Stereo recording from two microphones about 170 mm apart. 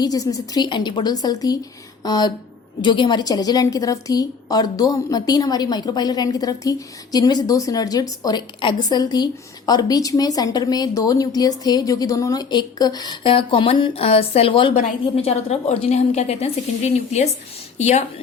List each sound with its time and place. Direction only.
0.0 s a woman's voice: 20° left (ahead or behind)
14.8 s a woman's voice: 40° left (ahead or behind)